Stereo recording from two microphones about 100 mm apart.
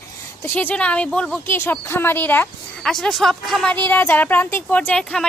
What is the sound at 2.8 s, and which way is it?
Speech, 5° left (ahead or behind).